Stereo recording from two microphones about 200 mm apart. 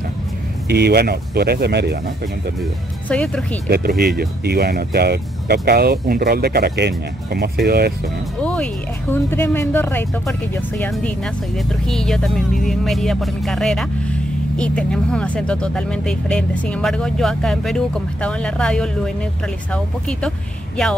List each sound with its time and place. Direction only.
0.7 s speech: 55° right (ahead or behind)
3.1 s speech: 5° left (ahead or behind)
3.6 s speech: 50° right (ahead or behind)
8.4 s music: 5° left (ahead or behind)
9.1 s speech: 10° left (ahead or behind)